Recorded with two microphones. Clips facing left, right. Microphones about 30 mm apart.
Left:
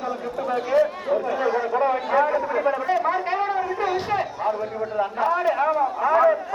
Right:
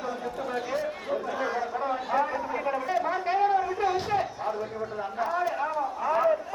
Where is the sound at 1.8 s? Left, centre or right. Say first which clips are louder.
Left 7 dB; left.